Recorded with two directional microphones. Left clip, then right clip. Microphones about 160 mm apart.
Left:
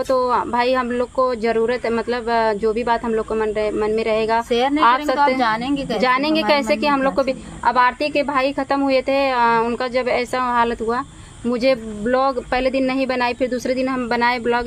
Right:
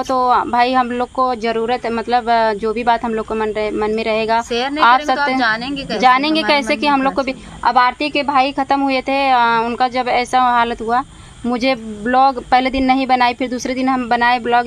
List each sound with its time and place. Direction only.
0.1 s a woman's voice: 30° right (ahead or behind)